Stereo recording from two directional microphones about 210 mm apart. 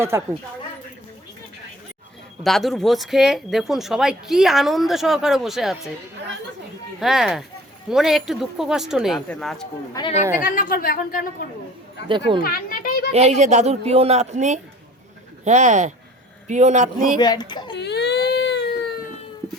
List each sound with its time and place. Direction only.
0.1 s speech: 10° right (ahead or behind)
2.4 s speech: centre (ahead or behind)
7.0 s speech: centre (ahead or behind)
9.9 s a child's voice: 25° left (ahead or behind)
10.4 s speech: 40° left (ahead or behind)
12.0 s speech: 25° right (ahead or behind)
12.4 s speech: 45° left (ahead or behind)
13.1 s speech: 30° right (ahead or behind)
17.2 s a child's voice: 20° left (ahead or behind)
17.7 s baby cry: 55° left (ahead or behind)